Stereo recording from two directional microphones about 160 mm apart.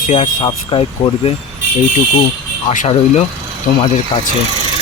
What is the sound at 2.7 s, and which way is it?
Speech, 45° left (ahead or behind).